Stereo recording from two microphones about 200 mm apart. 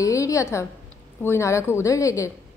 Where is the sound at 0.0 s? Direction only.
15° left (ahead or behind).